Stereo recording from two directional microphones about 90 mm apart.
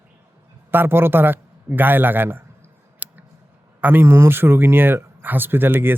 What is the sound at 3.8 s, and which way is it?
Speech, 25° right (ahead or behind).